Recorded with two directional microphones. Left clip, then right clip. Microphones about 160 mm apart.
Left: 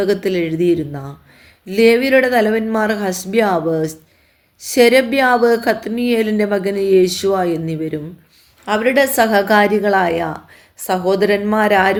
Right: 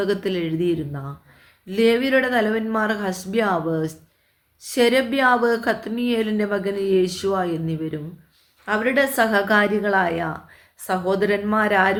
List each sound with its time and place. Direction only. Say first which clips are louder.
0.0 s a woman's voice: left 6 dB; 40° left (ahead or behind)